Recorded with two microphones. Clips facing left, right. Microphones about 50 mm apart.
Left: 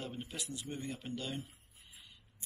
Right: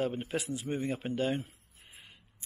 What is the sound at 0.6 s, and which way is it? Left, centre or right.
Speech, right.